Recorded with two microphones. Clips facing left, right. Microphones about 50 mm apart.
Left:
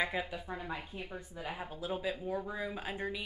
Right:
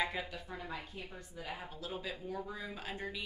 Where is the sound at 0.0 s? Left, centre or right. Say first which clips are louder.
Left 2 dB; centre.